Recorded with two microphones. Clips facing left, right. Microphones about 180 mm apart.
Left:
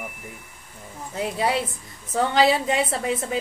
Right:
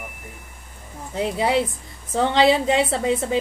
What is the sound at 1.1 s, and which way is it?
A woman's voice, 25° right (ahead or behind).